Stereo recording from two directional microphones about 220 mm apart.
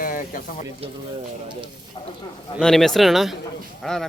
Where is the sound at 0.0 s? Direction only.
40° left (ahead or behind).